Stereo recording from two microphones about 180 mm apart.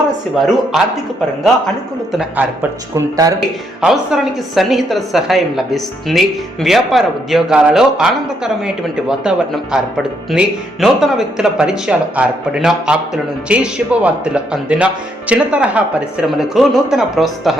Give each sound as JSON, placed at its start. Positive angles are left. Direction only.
{"t": 0.3, "sound": "a woman's voice", "side_deg": 0}
{"t": 2.1, "sound": "a man's voice", "side_deg": -10}
{"t": 3.2, "sound": "a man's voice", "side_deg": -20}
{"t": 3.8, "sound": "a woman's voice", "side_deg": -5}